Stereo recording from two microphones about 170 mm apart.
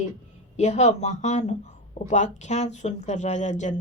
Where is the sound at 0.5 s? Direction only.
40° left (ahead or behind).